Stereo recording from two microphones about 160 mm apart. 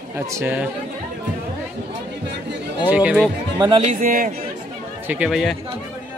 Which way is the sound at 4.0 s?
55° right (ahead or behind).